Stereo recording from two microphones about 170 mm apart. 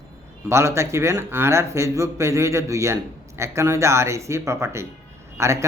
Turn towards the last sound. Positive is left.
turn(degrees=-15)  # may be behind; listen again after turning